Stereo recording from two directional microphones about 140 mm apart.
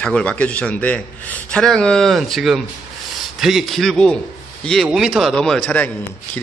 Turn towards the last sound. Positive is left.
turn(degrees=10)  # may be behind; listen again after turning